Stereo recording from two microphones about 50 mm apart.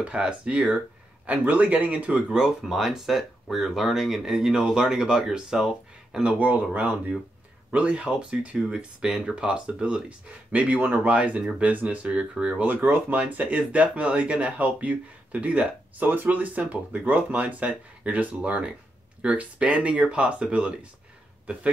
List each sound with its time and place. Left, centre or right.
0.0 s speech: right
2.6 s speech: centre
6.2 s speech: right
10.5 s speech: right
12.6 s speech: right